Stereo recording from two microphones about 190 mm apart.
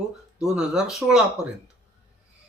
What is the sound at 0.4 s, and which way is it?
Speech, 5° right (ahead or behind).